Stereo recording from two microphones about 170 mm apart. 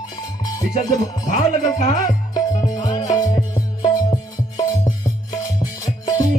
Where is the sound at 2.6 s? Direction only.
25° left (ahead or behind).